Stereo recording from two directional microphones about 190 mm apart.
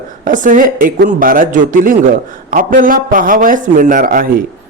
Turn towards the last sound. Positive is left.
turn(degrees=-45)  # may be behind; listen again after turning